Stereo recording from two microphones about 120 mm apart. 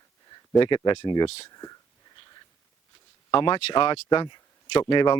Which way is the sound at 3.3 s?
45° left (ahead or behind).